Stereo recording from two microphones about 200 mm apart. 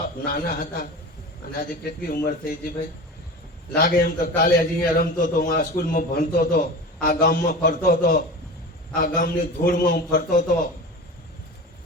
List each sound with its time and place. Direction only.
0.3 s a man's voice: 45° left (ahead or behind)
3.8 s a man's voice: 45° left (ahead or behind)